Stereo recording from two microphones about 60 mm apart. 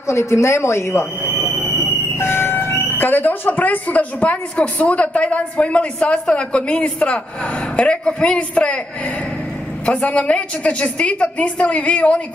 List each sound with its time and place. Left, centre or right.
0.1 s speech: left
1.3 s a sound: right
2.1 s vehicle: left
3.0 s a woman's voice: left
9.8 s a woman's voice: left